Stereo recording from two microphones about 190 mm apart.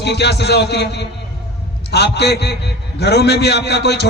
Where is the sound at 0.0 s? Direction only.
60° left (ahead or behind).